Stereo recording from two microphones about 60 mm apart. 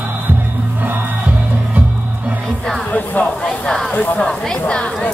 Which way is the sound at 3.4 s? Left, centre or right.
Centre.